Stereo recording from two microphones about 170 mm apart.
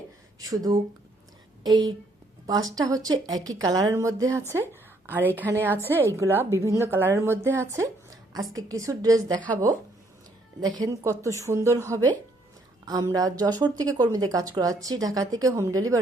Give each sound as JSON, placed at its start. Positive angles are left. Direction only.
{"t": 0.3, "sound": "speech", "side_deg": -20}
{"t": 2.5, "sound": "speech", "side_deg": -20}
{"t": 4.7, "sound": "a sound", "side_deg": -10}
{"t": 5.4, "sound": "a woman's voice", "side_deg": -15}
{"t": 10.6, "sound": "speech", "side_deg": -25}